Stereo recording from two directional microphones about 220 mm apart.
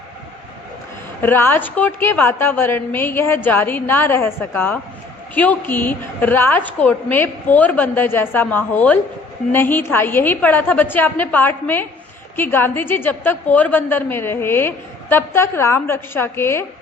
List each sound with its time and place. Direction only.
1.2 s a woman's voice: 10° left (ahead or behind)